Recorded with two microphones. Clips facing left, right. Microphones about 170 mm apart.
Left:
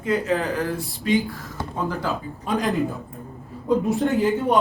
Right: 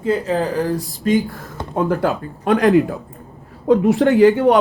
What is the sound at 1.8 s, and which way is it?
Speech, 60° right (ahead or behind).